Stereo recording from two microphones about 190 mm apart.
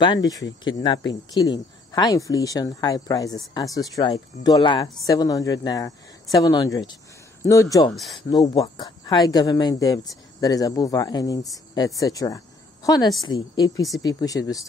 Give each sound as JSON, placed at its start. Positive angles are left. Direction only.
{"t": 0.0, "sound": "speech", "side_deg": 20}
{"t": 7.9, "sound": "speech", "side_deg": 0}
{"t": 8.3, "sound": "speech", "side_deg": 20}